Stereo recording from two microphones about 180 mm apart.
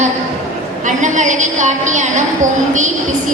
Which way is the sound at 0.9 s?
45° right (ahead or behind).